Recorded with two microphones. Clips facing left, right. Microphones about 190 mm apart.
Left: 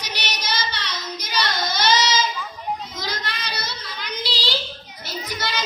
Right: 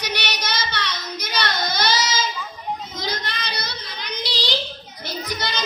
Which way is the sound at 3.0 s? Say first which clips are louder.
Right 2 dB; 20° right (ahead or behind).